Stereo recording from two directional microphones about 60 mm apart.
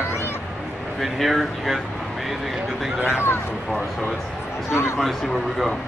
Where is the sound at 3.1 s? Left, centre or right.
Left.